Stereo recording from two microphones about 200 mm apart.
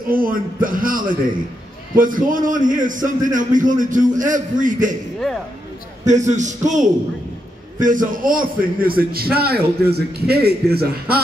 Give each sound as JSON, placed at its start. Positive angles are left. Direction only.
{"t": 0.1, "sound": "a man's voice", "side_deg": -45}
{"t": 6.0, "sound": "a man's voice", "side_deg": -35}